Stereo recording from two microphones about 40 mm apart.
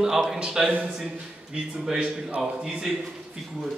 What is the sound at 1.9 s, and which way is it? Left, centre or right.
Speech, right.